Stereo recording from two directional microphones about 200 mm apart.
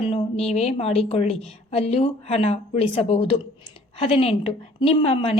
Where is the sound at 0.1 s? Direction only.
30° left (ahead or behind).